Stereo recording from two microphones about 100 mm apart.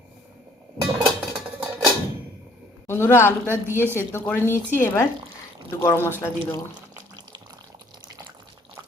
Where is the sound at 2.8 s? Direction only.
25° left (ahead or behind).